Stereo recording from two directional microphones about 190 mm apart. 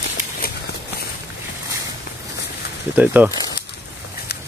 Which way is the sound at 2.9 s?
10° right (ahead or behind).